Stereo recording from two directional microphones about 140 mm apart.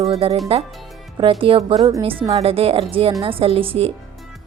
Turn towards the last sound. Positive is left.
turn(degrees=-40)  # may be behind; listen again after turning